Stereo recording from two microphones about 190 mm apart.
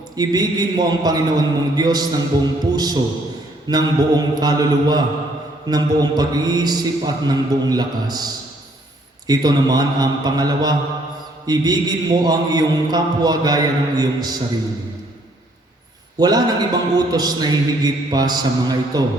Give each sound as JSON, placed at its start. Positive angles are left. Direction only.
{"t": 0.2, "sound": "a man's voice", "side_deg": -20}
{"t": 16.1, "sound": "a man's voice", "side_deg": -20}